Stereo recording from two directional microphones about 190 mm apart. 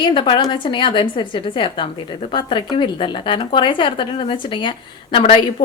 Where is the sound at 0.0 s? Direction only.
25° left (ahead or behind).